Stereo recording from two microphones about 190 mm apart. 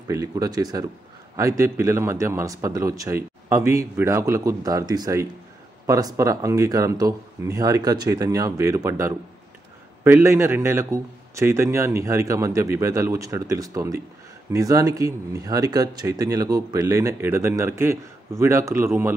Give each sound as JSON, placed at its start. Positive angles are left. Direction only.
{"t": 0.1, "sound": "speech", "side_deg": -20}